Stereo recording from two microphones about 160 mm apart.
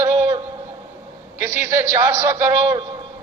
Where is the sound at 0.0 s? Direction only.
25° right (ahead or behind).